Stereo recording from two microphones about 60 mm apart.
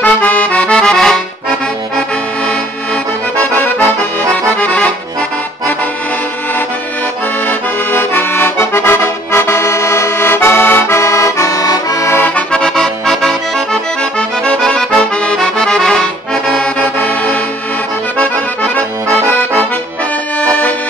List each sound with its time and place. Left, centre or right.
0.0 s music: left; by 1.2 s centre
4.6 s accordion: left
7.4 s accordion: left
12.4 s accordion: centre
14.4 s accordion: centre
17.0 s music: left
18.1 s accordion: left